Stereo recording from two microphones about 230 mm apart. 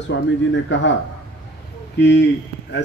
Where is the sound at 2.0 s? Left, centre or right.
Left.